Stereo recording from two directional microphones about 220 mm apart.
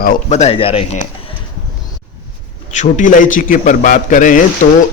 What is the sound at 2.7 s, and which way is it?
A man's voice, 35° left (ahead or behind).